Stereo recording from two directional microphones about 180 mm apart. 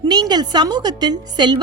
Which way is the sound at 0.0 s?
25° right (ahead or behind).